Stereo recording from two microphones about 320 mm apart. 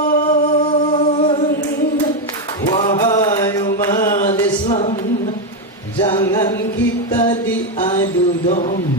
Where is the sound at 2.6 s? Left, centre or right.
Centre.